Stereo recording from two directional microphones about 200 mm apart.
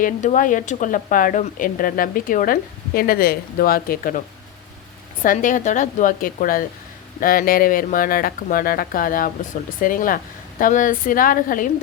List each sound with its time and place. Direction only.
0.0 s speech: 40° left (ahead or behind)
5.2 s speech: 40° left (ahead or behind)